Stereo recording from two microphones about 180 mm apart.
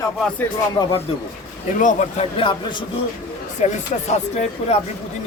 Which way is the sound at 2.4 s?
25° left (ahead or behind).